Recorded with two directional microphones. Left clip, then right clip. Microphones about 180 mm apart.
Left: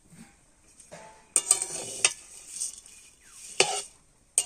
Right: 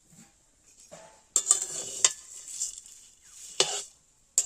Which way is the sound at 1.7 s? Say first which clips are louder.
Even; 15° right (ahead or behind).